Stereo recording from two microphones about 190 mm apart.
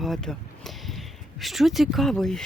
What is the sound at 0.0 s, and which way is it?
Speech, centre (ahead or behind).